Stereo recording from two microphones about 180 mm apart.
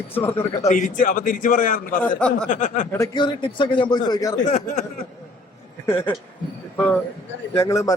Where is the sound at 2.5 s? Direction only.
45° left (ahead or behind).